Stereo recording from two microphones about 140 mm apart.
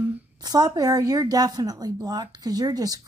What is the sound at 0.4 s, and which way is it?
A woman's voice, 30° right (ahead or behind).